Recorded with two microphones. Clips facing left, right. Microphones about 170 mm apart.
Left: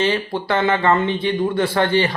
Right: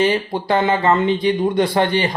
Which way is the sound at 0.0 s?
15° right (ahead or behind).